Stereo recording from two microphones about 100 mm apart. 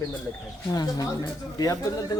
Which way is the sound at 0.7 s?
40° left (ahead or behind).